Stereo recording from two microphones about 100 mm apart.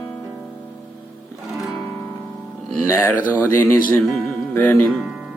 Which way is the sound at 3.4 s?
20° left (ahead or behind).